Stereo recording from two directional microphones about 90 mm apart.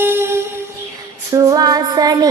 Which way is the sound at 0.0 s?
25° right (ahead or behind).